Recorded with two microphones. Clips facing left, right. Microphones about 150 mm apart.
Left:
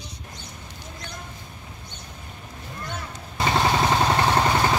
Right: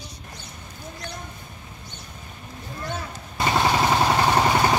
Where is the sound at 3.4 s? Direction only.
5° right (ahead or behind).